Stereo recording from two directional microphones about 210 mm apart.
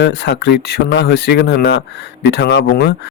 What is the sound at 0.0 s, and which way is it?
Speech, 55° left (ahead or behind).